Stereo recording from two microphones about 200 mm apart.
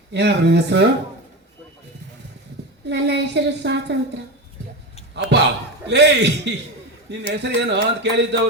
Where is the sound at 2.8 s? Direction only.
60° right (ahead or behind).